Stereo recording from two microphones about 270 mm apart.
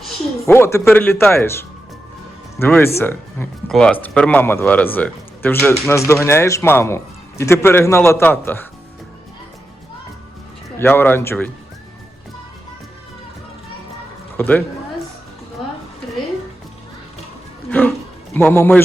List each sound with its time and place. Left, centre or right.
0.0 s a man's voice: centre
10.8 s a man's voice: centre
14.3 s a man's voice: centre
17.7 s music: centre